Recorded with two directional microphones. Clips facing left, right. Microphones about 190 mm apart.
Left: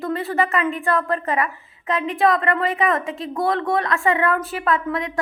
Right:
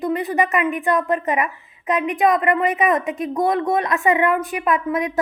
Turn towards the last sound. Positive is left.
turn(degrees=-20)  # may be behind; listen again after turning